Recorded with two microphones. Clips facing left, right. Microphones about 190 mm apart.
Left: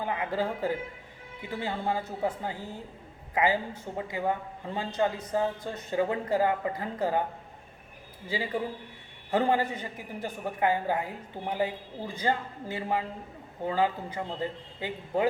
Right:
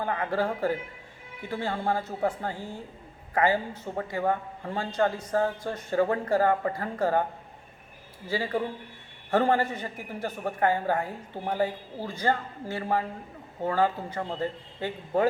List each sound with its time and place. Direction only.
0.0 s a man's voice: 15° left (ahead or behind)
2.6 s a woman's voice: 10° right (ahead or behind)
3.3 s a man's voice: 15° left (ahead or behind)
8.3 s a man's voice: 15° left (ahead or behind)